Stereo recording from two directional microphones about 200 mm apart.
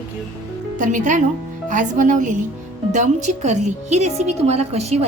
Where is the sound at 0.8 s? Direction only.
40° right (ahead or behind).